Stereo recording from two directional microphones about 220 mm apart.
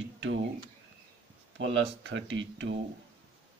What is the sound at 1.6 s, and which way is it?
Speech, 55° right (ahead or behind).